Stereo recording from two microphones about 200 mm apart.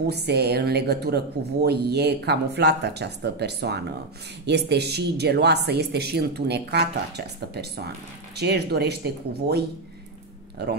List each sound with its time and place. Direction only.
0.0 s speech: 55° right (ahead or behind)